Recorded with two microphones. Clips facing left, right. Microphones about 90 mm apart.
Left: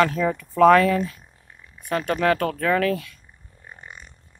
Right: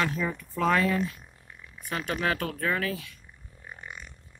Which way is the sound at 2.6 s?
60° left (ahead or behind).